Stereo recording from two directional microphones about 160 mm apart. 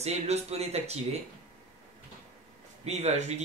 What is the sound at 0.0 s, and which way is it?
Speech, 45° right (ahead or behind).